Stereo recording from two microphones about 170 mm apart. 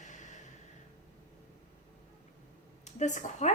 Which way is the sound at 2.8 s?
45° left (ahead or behind).